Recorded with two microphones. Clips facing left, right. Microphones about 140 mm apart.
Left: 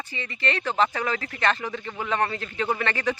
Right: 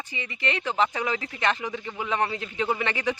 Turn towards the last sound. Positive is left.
turn(degrees=-15)  # may be behind; listen again after turning